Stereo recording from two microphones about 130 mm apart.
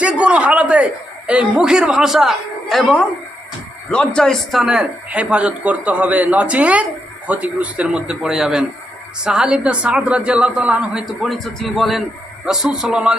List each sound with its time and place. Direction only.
0.0 s a man's voice: 10° right (ahead or behind)